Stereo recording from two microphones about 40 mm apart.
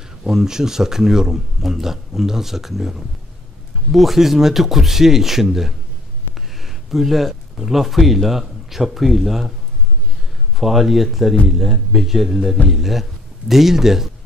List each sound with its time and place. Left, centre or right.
0.3 s speech: centre
10.6 s a man's voice: centre